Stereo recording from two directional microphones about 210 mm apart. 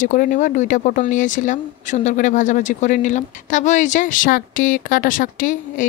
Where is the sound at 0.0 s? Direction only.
40° left (ahead or behind).